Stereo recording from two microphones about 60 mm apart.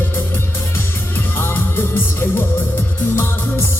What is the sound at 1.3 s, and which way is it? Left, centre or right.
Music, left.